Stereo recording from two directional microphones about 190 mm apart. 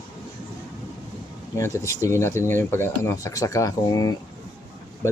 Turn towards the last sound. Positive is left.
turn(degrees=20)  # may be behind; listen again after turning